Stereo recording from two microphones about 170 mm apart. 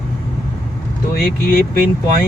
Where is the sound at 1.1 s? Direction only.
60° left (ahead or behind).